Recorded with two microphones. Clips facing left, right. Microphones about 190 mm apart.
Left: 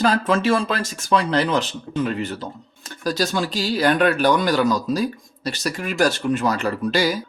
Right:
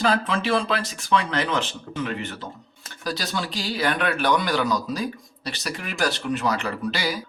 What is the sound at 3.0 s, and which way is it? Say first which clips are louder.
Speech: left 6 dB; 45° left (ahead or behind).